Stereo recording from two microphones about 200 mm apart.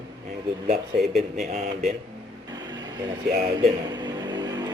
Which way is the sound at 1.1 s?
Centre (ahead or behind).